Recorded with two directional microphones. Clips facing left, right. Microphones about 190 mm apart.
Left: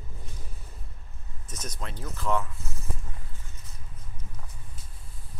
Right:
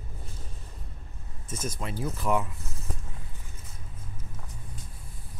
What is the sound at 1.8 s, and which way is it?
Speech, 10° right (ahead or behind).